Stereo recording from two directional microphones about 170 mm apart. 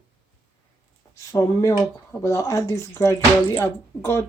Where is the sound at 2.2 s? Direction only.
15° left (ahead or behind).